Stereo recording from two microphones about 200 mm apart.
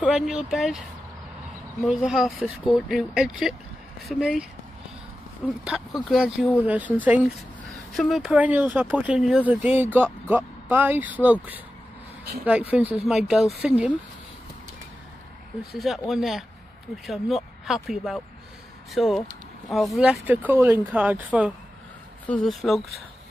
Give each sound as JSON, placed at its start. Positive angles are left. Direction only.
{"t": 0.0, "sound": "speech", "side_deg": -5}
{"t": 1.9, "sound": "speech", "side_deg": -5}
{"t": 5.6, "sound": "speech", "side_deg": -5}
{"t": 15.8, "sound": "speech", "side_deg": 0}
{"t": 22.2, "sound": "speech", "side_deg": 5}